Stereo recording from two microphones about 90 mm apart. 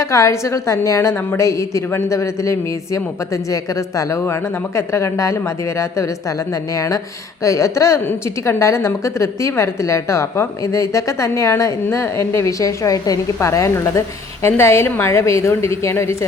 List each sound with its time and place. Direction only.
0.0 s a woman's voice: 35° left (ahead or behind)